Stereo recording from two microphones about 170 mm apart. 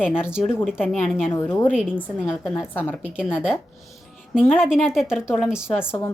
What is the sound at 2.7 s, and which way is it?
Speech, 10° left (ahead or behind).